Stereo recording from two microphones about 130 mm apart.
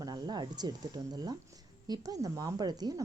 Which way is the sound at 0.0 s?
30° right (ahead or behind).